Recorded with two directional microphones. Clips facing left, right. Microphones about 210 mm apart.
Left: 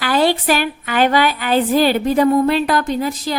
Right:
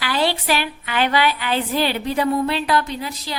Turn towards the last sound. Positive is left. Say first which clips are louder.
# left 8 dB
turn(degrees=50)  # may be behind; listen again after turning